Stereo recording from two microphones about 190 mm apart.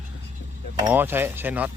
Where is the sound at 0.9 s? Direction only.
10° right (ahead or behind).